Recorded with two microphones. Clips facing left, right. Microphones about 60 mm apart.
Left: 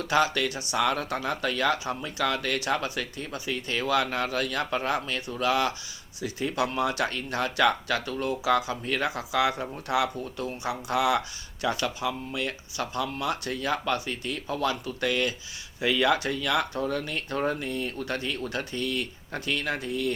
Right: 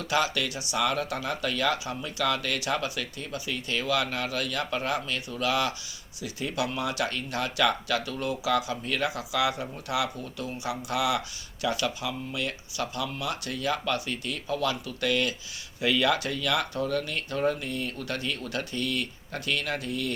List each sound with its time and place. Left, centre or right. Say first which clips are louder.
0.1 s speech: left 3 dB; left